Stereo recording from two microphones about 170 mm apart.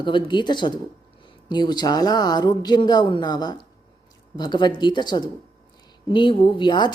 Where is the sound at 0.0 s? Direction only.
30° left (ahead or behind).